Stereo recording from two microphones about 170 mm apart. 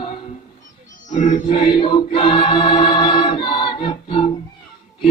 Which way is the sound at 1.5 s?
30° left (ahead or behind).